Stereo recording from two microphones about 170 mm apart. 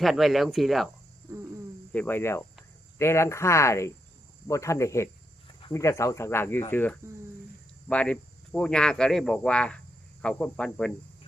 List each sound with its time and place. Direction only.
0.0 s speech: centre (ahead or behind)
1.9 s speech: 10° left (ahead or behind)